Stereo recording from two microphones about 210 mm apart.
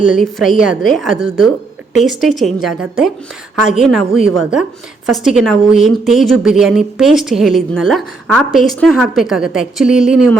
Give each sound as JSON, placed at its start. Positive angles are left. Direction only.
{"t": 0.2, "sound": "a woman's voice", "side_deg": 0}